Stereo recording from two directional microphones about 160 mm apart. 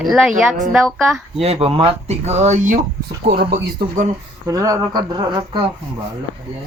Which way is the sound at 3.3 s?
75° right (ahead or behind).